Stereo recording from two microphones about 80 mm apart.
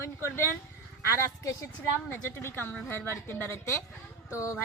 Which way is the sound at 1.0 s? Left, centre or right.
Left.